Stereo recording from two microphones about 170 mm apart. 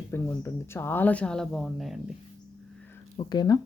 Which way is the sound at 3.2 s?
25° left (ahead or behind).